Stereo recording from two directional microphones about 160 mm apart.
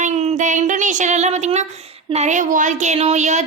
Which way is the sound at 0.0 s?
45° right (ahead or behind).